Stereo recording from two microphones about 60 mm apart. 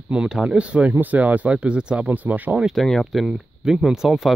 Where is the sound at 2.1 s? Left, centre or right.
Right.